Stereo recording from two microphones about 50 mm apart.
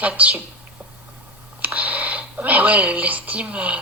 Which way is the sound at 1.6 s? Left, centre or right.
Right.